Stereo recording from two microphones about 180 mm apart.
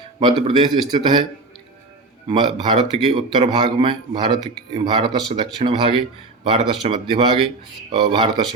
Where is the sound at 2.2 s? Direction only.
25° right (ahead or behind).